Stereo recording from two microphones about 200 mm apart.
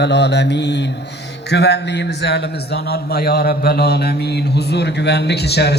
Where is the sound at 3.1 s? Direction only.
50° left (ahead or behind).